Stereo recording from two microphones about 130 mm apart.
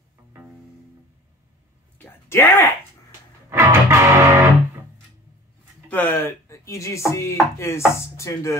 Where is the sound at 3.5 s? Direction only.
20° right (ahead or behind).